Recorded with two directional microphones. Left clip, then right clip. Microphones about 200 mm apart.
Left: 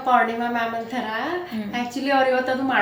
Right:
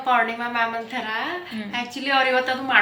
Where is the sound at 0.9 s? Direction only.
20° left (ahead or behind).